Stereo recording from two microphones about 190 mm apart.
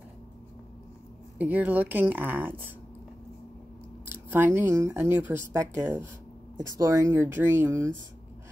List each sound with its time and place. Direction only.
1.4 s speech: 10° right (ahead or behind)
4.1 s speech: 10° right (ahead or behind)